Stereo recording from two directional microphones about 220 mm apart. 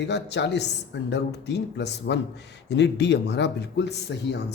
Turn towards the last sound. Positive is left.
turn(degrees=50)  # may be behind; listen again after turning